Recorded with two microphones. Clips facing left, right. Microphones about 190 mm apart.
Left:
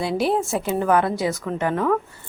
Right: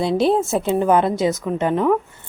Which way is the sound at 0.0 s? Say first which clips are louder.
Right 4 dB; 25° right (ahead or behind).